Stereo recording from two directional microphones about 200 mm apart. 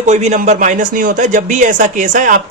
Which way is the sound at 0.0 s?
35° right (ahead or behind).